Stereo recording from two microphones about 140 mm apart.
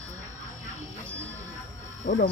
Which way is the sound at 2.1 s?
90° left.